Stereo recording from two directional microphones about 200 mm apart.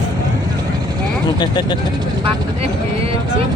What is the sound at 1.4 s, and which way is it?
Speech, 20° left (ahead or behind).